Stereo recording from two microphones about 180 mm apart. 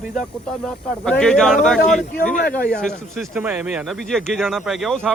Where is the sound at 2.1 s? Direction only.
55° left (ahead or behind).